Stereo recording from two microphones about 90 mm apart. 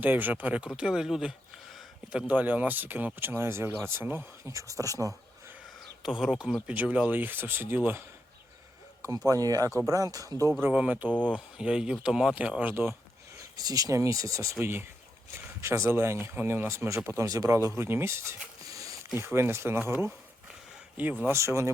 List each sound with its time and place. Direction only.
0.0 s speech: 20° right (ahead or behind)
2.1 s speech: 15° right (ahead or behind); by 5.1 s 40° right (ahead or behind)
6.0 s speech: 5° right (ahead or behind); by 8.0 s 20° right (ahead or behind)
9.1 s speech: 40° right (ahead or behind)
10.6 s speech: 15° right (ahead or behind)
12.7 s speech: 25° right (ahead or behind)
13.6 s speech: 45° right (ahead or behind)
14.6 s speech: 25° right (ahead or behind)
17.2 s speech: 40° right (ahead or behind)
17.7 s speech: 25° right (ahead or behind)
19.1 s speech: 25° right (ahead or behind)
21.3 s speech: 30° right (ahead or behind)